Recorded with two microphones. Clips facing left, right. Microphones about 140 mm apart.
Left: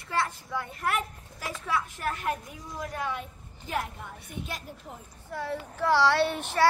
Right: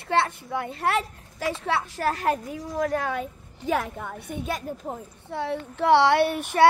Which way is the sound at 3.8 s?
90° right.